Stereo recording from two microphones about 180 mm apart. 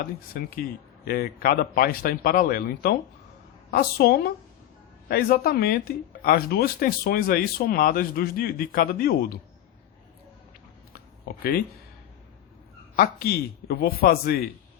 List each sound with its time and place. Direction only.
0.0 s speech: 50° left (ahead or behind)
3.7 s speech: 65° left (ahead or behind)
13.0 s speech: 60° left (ahead or behind)